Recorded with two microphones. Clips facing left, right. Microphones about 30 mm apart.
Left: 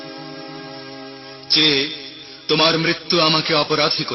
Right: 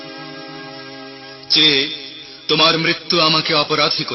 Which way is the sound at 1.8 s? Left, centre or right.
Centre.